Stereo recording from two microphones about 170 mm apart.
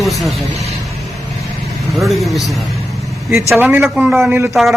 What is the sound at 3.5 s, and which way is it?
A man's voice, 10° right (ahead or behind).